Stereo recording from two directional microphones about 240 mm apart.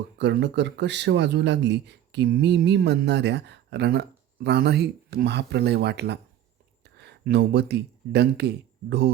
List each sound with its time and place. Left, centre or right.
0.2 s speech: right